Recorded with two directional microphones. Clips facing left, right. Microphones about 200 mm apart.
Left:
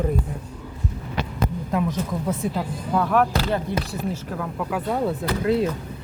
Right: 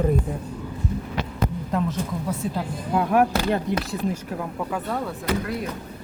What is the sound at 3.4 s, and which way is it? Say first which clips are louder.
Speech: right 1 dB; 15° right (ahead or behind).